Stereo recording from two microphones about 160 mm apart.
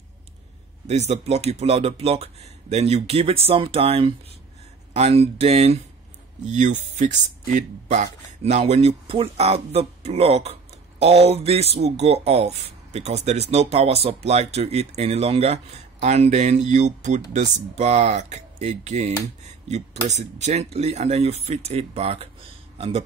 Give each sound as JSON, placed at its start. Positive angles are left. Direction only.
{"t": 0.8, "sound": "speech", "side_deg": -45}